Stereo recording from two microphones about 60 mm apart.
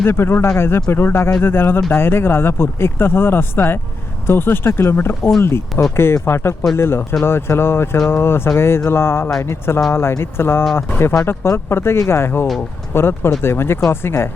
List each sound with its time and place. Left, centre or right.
0.0 s speech: left